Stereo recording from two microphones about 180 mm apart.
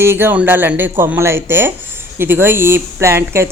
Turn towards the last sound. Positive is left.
turn(degrees=-15)  # may be behind; listen again after turning